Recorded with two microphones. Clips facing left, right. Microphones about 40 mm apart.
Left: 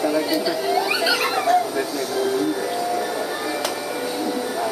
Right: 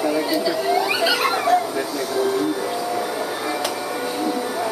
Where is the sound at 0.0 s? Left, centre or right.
Centre.